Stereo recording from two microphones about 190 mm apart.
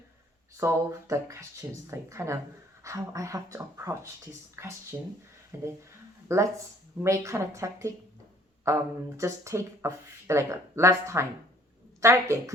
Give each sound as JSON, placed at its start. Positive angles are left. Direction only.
{"t": 0.5, "sound": "speech", "side_deg": -15}